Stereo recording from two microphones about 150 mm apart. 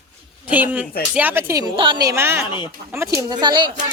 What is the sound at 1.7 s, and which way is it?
Speech, 30° right (ahead or behind).